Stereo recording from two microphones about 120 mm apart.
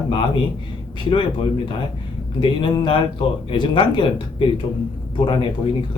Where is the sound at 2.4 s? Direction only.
45° left (ahead or behind).